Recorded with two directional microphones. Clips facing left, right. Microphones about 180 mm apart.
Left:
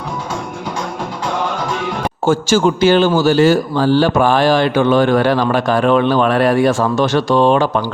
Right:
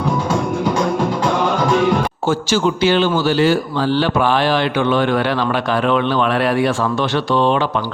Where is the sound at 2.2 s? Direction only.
45° left (ahead or behind).